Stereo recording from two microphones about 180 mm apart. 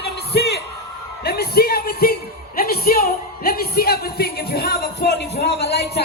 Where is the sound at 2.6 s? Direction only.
55° left (ahead or behind).